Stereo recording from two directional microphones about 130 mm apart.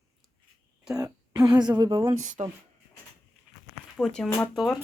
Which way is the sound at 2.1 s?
80° right.